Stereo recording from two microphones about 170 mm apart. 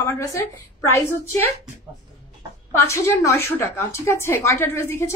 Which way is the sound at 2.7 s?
15° left (ahead or behind).